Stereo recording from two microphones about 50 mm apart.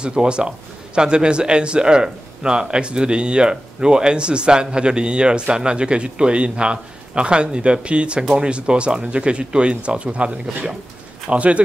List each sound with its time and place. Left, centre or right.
0.0 s a man's voice: centre